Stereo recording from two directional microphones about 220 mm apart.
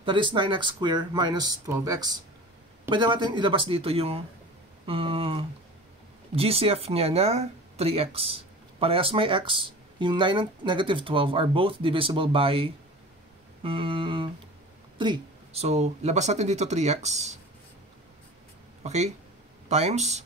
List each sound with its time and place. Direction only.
0.0 s speech: 20° right (ahead or behind)
18.8 s speech: 30° right (ahead or behind)